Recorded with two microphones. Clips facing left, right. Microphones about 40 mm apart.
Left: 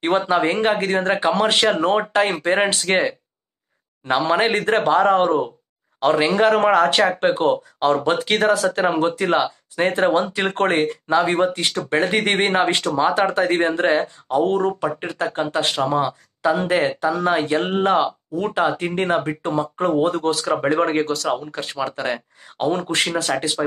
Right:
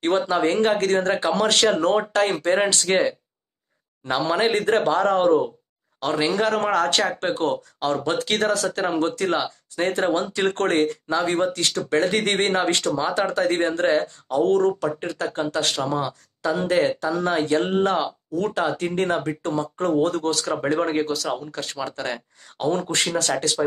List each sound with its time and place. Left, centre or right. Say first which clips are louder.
0.0 s speech: left 2 dB; left